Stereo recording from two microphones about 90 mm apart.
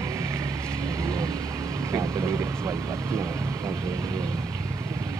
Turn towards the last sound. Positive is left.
turn(degrees=-30)  # may be behind; listen again after turning